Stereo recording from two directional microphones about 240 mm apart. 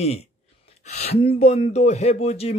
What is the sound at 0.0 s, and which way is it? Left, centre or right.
Speech, left.